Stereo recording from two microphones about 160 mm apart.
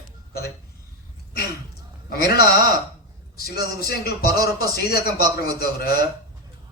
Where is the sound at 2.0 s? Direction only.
70° left (ahead or behind).